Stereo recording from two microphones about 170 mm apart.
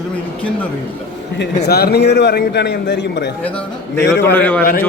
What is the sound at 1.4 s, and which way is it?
A man's voice, 70° left (ahead or behind).